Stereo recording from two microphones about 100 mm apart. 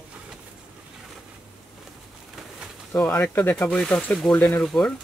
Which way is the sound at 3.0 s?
15° left (ahead or behind).